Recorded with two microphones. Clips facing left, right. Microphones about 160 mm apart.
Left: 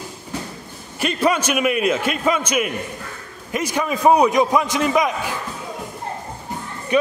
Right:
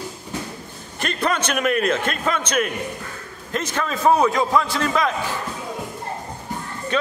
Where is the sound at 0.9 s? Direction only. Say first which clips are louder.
Left 4 dB; 10° left (ahead or behind).